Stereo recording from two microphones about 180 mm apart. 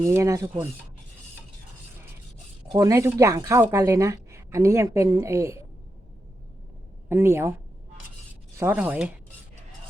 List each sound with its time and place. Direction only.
0.0 s speech: 15° right (ahead or behind)
2.7 s a woman's voice: 15° right (ahead or behind)
7.1 s a woman's voice: 15° right (ahead or behind)
8.5 s a woman's voice: 10° right (ahead or behind)